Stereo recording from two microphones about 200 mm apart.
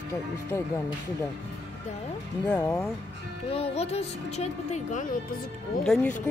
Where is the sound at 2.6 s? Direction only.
15° left (ahead or behind).